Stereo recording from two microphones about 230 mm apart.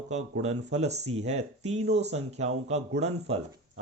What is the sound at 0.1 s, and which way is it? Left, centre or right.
Speech, right.